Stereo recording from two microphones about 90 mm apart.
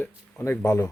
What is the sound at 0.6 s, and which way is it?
Speech, 40° left (ahead or behind).